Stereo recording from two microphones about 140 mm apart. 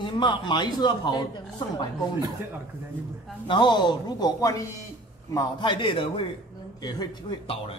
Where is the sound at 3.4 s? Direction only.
35° left (ahead or behind).